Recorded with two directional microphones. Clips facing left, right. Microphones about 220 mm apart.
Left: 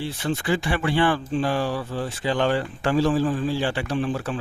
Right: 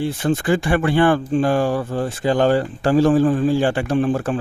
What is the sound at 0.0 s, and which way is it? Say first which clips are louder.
Speech: right 7 dB; 50° right (ahead or behind).